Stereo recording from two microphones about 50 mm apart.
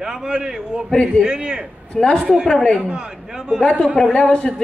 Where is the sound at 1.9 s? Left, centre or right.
Centre.